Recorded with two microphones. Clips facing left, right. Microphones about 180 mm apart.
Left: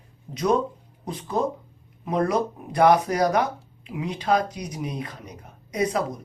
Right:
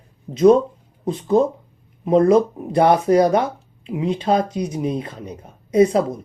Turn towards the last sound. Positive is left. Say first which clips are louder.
# right 10 dB
turn(degrees=-25)  # may be behind; listen again after turning